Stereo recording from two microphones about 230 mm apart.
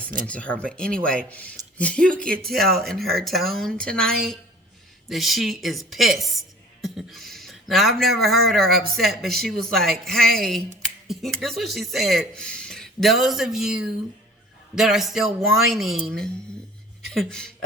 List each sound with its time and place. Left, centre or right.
0.3 s speech: centre
2.4 s speech: right
2.7 s speech: centre